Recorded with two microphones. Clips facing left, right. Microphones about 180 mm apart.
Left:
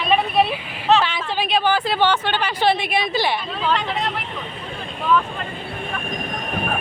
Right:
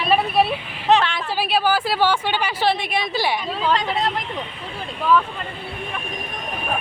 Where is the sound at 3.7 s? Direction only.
35° right (ahead or behind).